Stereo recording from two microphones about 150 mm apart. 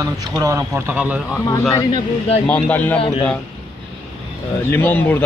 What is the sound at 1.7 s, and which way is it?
Speech, 25° left (ahead or behind).